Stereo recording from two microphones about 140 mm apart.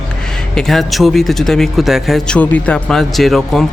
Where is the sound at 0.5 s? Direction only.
5° left (ahead or behind).